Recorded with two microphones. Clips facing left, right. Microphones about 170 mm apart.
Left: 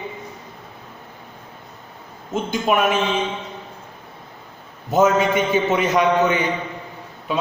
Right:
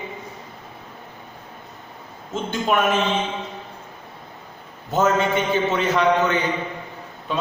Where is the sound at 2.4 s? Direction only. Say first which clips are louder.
Left 1 dB; 10° left (ahead or behind).